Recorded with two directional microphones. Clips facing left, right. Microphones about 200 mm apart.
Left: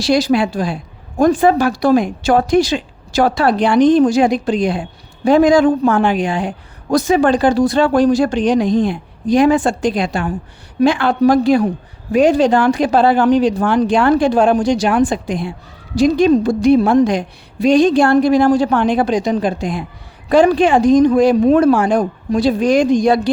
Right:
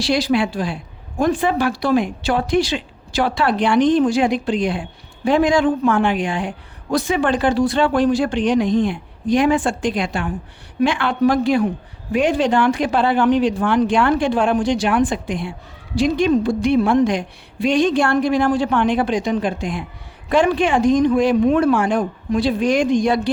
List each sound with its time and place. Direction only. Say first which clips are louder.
0.0 s speech: left 4 dB; 40° left (ahead or behind)